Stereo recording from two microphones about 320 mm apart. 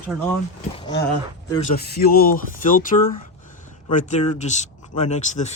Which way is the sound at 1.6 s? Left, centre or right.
Left.